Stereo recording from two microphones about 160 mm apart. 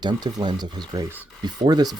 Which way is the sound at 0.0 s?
25° right (ahead or behind).